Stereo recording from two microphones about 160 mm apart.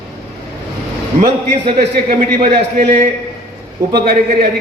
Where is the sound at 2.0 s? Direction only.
55° right (ahead or behind).